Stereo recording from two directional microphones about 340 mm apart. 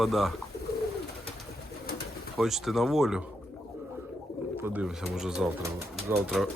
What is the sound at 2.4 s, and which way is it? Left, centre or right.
Speech, centre.